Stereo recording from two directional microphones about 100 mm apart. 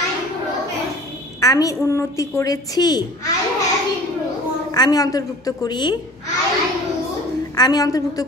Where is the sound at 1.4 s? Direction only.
35° left (ahead or behind).